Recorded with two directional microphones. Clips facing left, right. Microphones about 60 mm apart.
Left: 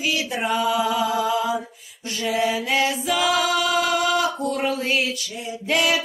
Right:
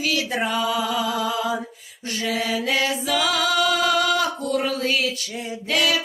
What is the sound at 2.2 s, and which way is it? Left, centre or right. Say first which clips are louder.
Mantra: left 2 dB; centre.